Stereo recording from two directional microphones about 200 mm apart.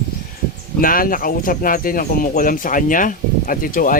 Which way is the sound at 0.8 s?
45° left (ahead or behind).